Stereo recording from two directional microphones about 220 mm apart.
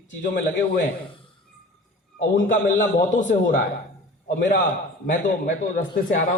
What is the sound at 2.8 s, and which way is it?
A man's voice, 35° left (ahead or behind).